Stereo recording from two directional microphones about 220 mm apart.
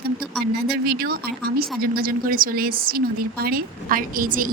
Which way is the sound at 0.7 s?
45° right (ahead or behind).